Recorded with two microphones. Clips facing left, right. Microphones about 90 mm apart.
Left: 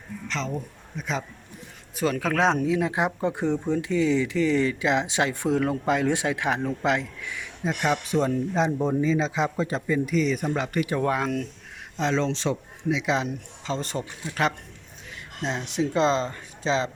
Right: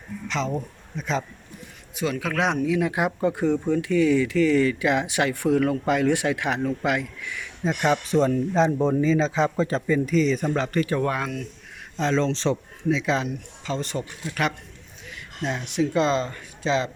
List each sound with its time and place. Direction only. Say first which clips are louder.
0.3 s a man's voice: right 4 dB; 5° right (ahead or behind)
2.0 s speech: left 2 dB; 40° left (ahead or behind)
7.6 s speech: right 3 dB; 5° left (ahead or behind)
13.2 s speech: even; 35° left (ahead or behind)
15.1 s speech: right 1 dB; 25° left (ahead or behind)